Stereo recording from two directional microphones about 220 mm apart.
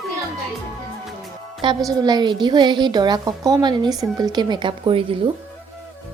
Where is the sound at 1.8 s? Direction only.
15° right (ahead or behind).